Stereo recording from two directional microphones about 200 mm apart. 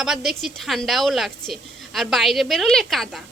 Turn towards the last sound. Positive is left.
turn(degrees=0)  # may be behind; listen again after turning